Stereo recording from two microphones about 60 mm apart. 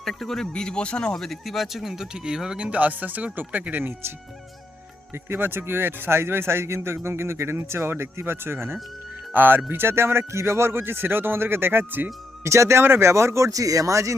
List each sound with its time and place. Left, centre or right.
0.0 s speech: centre
2.6 s speech: right
5.1 s a man's voice: right
12.4 s a man's voice: right
13.5 s speech: right